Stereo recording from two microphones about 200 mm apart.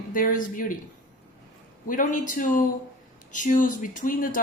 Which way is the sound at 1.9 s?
40° left (ahead or behind).